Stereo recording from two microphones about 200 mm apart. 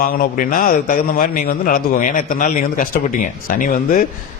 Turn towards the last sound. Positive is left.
turn(degrees=45)  # may be behind; listen again after turning